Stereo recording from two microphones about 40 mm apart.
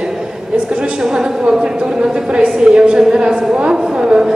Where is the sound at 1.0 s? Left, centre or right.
Centre.